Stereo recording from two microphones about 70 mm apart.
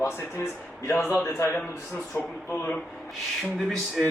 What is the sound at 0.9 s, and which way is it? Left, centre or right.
Speech, left.